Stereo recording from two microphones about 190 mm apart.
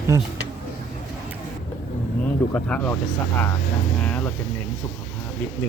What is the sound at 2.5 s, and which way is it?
Speech, 10° left (ahead or behind).